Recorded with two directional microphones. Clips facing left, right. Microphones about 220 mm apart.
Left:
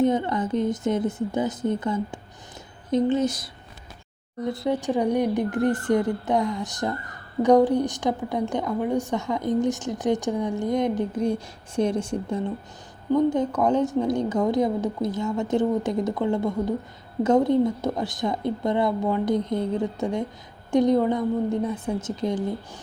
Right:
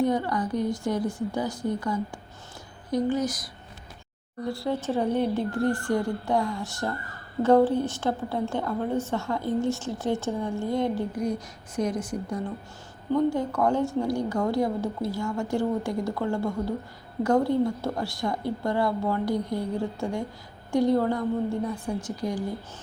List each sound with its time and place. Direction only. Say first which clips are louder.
0.0 s a woman's voice: left 3 dB; 20° left (ahead or behind)